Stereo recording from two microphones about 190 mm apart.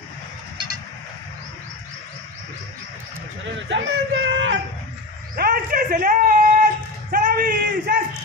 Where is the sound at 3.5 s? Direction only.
70° right (ahead or behind).